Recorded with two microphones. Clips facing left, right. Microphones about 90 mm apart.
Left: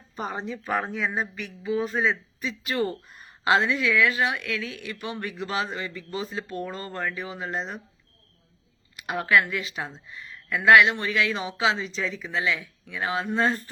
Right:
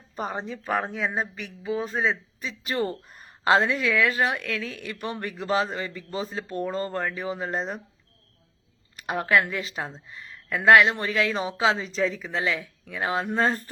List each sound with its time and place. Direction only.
0.3 s speech: centre (ahead or behind)
1.4 s speech: 35° right (ahead or behind)
1.8 s speech: centre (ahead or behind)
2.4 s a woman's voice: 35° right (ahead or behind)
9.0 s speech: 35° right (ahead or behind)